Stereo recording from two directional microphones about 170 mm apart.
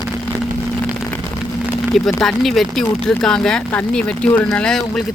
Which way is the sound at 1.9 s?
Centre (ahead or behind).